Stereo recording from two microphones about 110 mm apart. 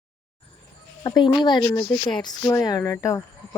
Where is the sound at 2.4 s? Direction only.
25° left (ahead or behind).